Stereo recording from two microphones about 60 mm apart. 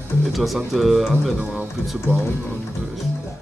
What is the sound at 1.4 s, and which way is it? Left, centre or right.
Speech, right.